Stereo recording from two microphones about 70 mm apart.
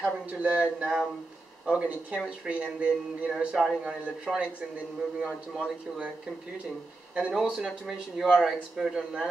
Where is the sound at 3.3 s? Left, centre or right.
Centre.